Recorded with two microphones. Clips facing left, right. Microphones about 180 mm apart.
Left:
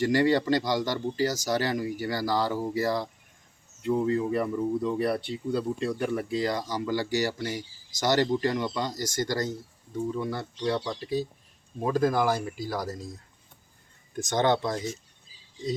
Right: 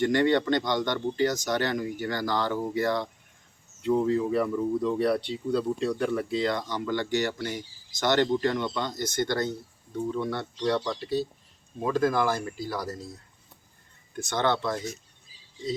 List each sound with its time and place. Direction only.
0.1 s speech: 5° left (ahead or behind)
14.2 s speech: 15° left (ahead or behind)